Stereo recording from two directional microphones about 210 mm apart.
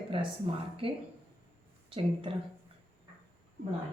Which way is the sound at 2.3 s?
25° right (ahead or behind).